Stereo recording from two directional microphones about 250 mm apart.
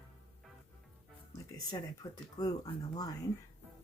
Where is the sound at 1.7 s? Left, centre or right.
Centre.